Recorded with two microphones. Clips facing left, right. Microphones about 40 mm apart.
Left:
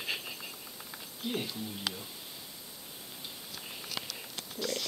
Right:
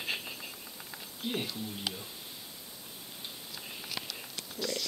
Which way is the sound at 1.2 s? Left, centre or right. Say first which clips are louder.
Even; centre.